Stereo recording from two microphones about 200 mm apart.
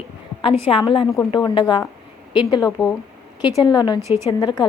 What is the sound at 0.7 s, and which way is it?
A woman's voice, 25° left (ahead or behind).